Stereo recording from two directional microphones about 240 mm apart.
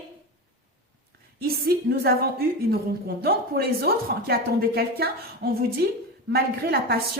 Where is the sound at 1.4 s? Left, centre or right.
Right.